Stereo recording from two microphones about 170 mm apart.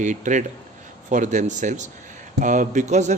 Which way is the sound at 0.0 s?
45° right (ahead or behind).